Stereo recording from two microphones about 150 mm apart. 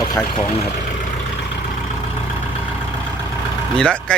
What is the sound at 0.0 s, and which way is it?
Speech, 25° left (ahead or behind).